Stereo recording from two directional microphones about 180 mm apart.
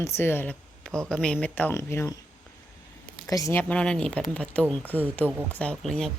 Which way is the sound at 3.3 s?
20° left (ahead or behind).